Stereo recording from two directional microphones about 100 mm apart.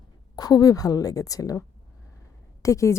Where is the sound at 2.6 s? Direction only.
30° left (ahead or behind).